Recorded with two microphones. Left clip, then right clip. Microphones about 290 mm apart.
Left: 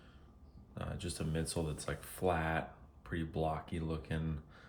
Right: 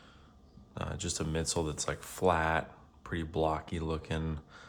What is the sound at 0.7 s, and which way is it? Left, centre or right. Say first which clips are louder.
Speech: right 6 dB; right.